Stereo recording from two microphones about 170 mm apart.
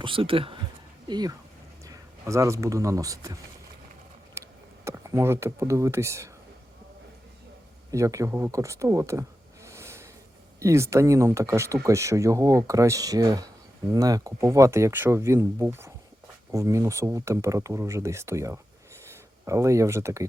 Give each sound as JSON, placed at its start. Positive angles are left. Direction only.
{"t": 0.0, "sound": "speech", "side_deg": -30}
{"t": 4.4, "sound": "tick", "side_deg": -15}
{"t": 4.9, "sound": "speech", "side_deg": -15}
{"t": 7.9, "sound": "speech", "side_deg": -20}
{"t": 9.6, "sound": "a sound", "side_deg": -15}
{"t": 10.6, "sound": "speech", "side_deg": -15}